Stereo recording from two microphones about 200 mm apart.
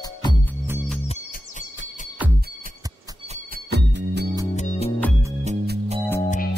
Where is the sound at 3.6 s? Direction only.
60° right (ahead or behind).